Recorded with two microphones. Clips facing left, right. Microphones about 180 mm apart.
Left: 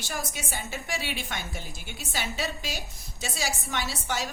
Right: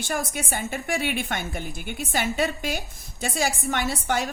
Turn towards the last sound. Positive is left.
turn(degrees=-55)  # may be behind; listen again after turning